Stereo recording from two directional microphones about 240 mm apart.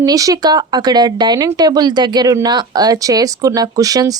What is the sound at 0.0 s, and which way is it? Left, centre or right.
Speech, centre.